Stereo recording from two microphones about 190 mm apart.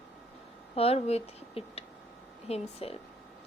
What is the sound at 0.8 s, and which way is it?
Speech, 30° left (ahead or behind).